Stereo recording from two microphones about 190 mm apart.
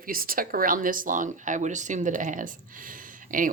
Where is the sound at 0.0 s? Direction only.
50° right (ahead or behind).